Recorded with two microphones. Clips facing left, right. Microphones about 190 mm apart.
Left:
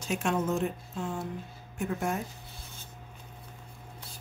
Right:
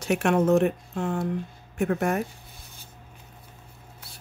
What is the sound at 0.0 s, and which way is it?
Speech, 70° right (ahead or behind).